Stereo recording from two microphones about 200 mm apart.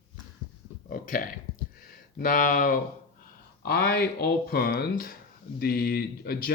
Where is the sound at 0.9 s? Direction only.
45° left (ahead or behind).